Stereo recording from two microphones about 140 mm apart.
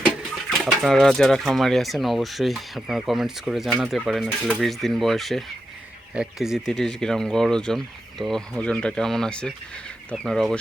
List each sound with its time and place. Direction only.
0.6 s speech: centre (ahead or behind)